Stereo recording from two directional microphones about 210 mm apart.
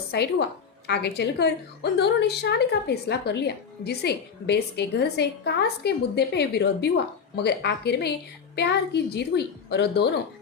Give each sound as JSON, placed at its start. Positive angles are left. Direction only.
{"t": 0.1, "sound": "a woman's voice", "side_deg": 50}